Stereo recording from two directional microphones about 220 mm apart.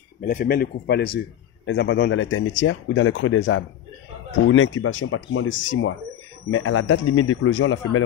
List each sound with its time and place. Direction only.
0.2 s speech: 40° left (ahead or behind); by 3.6 s 55° left (ahead or behind)
4.5 s speech: 65° left (ahead or behind)